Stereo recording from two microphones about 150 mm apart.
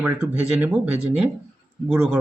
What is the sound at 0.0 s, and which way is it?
Speech, 10° right (ahead or behind).